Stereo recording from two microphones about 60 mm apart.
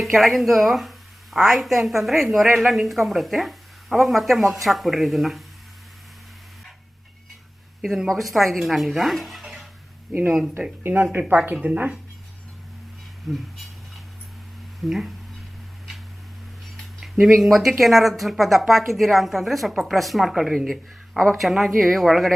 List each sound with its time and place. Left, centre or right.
0.0 s speech: centre
7.8 s speech: centre
10.1 s speech: right
13.3 s speech: centre
14.8 s a sound: centre
17.0 s speech: centre